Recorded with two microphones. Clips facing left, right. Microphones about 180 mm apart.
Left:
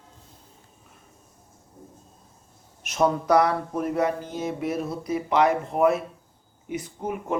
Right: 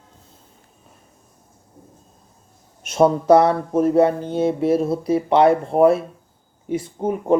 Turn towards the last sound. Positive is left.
turn(degrees=-30)  # may be behind; listen again after turning